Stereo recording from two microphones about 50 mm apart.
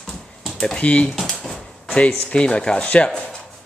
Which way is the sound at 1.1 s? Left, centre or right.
Centre.